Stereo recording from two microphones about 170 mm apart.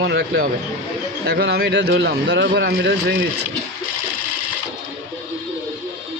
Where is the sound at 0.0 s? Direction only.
80° right.